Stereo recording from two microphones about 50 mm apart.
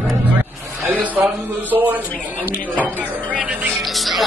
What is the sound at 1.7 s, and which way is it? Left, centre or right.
Speech, right.